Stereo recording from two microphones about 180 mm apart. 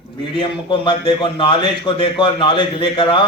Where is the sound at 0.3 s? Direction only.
25° left (ahead or behind).